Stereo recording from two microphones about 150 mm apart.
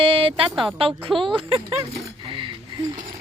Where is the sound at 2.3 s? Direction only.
35° right (ahead or behind).